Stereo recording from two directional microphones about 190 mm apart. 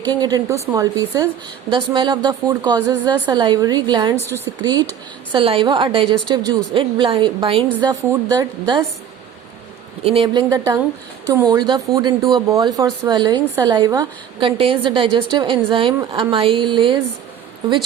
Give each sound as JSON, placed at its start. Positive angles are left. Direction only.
{"t": 0.1, "sound": "speech", "side_deg": -20}
{"t": 10.0, "sound": "speech", "side_deg": -30}
{"t": 10.5, "sound": "speech", "side_deg": -15}